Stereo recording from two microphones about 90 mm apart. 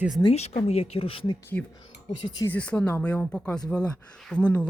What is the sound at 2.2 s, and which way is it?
Speech, 50° left (ahead or behind).